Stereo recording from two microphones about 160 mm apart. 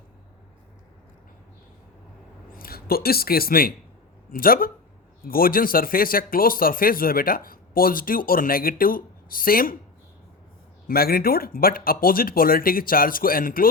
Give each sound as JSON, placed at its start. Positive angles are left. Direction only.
{"t": 2.5, "sound": "speech", "side_deg": 65}
{"t": 10.8, "sound": "speech", "side_deg": 70}